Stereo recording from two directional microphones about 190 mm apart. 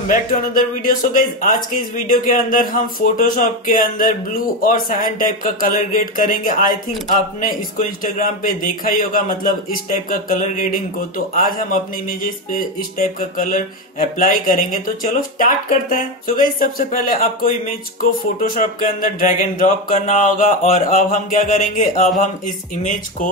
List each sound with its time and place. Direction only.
0.8 s speech: 45° left (ahead or behind)